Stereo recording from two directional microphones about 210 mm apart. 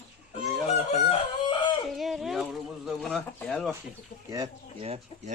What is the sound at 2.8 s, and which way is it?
Speech, 5° left (ahead or behind).